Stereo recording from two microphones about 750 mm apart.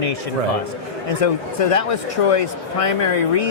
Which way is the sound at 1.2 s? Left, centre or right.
Left.